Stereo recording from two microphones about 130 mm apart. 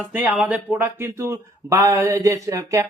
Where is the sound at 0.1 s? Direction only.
10° right (ahead or behind).